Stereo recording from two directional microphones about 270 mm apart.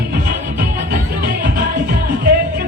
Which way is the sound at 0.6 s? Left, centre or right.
Right.